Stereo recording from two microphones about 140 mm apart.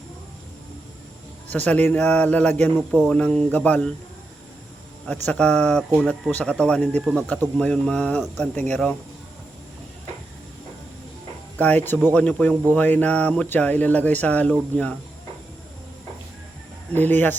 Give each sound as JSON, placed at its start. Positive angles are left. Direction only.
{"t": 1.5, "sound": "speech", "side_deg": 10}
{"t": 5.0, "sound": "speech", "side_deg": 10}
{"t": 11.5, "sound": "speech", "side_deg": 10}
{"t": 16.9, "sound": "speech", "side_deg": 15}